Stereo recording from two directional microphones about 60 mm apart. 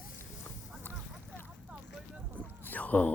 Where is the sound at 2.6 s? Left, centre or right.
Left.